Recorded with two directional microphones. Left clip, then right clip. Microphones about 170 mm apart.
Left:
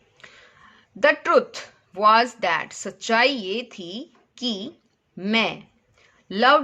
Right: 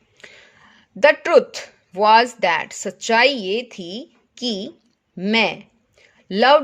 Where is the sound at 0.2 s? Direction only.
30° right (ahead or behind).